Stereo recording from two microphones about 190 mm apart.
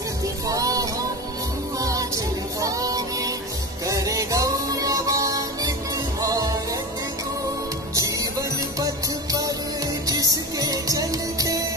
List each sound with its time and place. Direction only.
0.5 s music: 20° right (ahead or behind)
7.9 s music: 20° right (ahead or behind)